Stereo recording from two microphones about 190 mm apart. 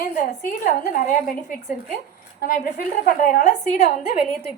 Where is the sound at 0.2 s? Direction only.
45° left (ahead or behind).